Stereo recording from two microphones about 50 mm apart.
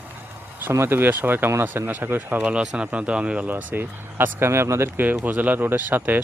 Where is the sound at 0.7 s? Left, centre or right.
Right.